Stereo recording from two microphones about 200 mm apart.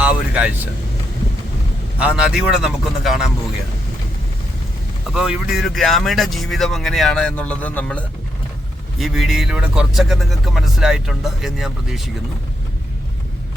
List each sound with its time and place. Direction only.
0.0 s vehicle: 5° right (ahead or behind)
2.0 s speech: 5° right (ahead or behind)
5.1 s speech: 5° right (ahead or behind)